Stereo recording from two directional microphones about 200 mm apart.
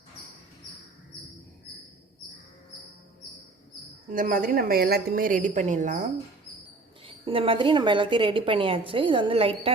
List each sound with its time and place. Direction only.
4.1 s a woman's voice: 45° right (ahead or behind)
6.6 s speech: 25° right (ahead or behind)